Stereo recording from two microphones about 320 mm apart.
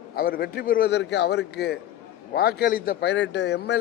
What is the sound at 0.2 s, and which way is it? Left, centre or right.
A man's voice, left.